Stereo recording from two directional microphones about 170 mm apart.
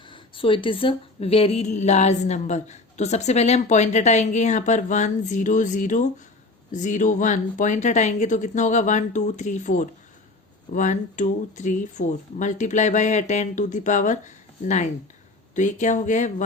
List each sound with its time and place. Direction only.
0.0 s speech: 30° left (ahead or behind); by 16.3 s 45° left (ahead or behind)